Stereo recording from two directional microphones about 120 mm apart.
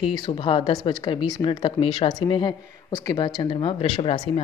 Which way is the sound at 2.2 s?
40° left (ahead or behind).